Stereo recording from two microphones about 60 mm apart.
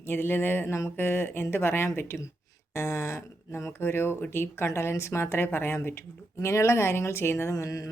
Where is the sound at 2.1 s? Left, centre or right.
Left.